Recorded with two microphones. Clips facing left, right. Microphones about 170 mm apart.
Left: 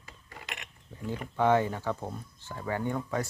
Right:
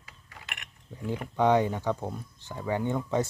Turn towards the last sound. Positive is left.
turn(degrees=-20)  # may be behind; listen again after turning